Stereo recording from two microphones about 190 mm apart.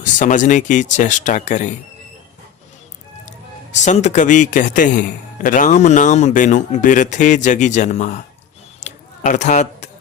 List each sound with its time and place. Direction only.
0.0 s a man's voice: 40° left (ahead or behind)
3.8 s a man's voice: 35° left (ahead or behind)
8.8 s a sound: 40° left (ahead or behind)